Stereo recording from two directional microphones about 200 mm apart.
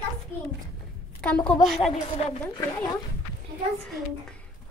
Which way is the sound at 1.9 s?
30° left (ahead or behind).